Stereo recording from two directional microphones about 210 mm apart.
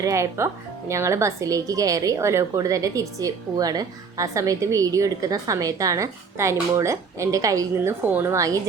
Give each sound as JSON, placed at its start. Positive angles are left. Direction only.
{"t": 0.0, "sound": "speech", "side_deg": -15}